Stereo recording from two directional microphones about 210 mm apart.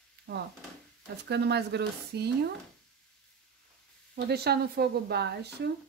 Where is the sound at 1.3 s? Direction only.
50° right (ahead or behind).